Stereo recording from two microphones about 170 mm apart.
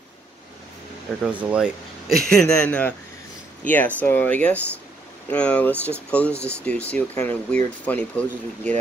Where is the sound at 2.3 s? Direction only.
5° left (ahead or behind).